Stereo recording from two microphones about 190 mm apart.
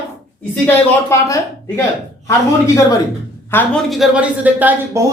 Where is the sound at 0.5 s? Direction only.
10° left (ahead or behind).